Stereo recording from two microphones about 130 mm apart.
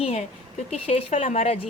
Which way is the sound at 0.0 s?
50° left (ahead or behind).